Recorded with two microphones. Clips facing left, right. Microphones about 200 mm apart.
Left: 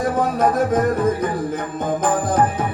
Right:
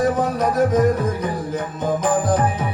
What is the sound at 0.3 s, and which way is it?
Music, 50° left (ahead or behind).